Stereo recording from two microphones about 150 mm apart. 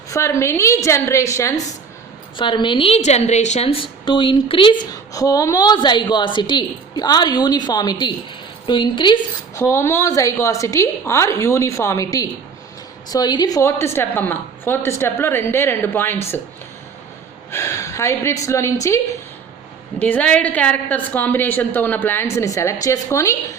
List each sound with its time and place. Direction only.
0.1 s a woman's voice: 20° left (ahead or behind)
2.3 s a woman's voice: 35° left (ahead or behind)
9.6 s a woman's voice: 15° left (ahead or behind)
17.5 s a woman's voice: 20° left (ahead or behind)
20.0 s a woman's voice: 10° left (ahead or behind)